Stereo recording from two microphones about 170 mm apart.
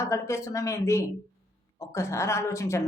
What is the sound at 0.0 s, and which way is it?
Speech, 15° left (ahead or behind).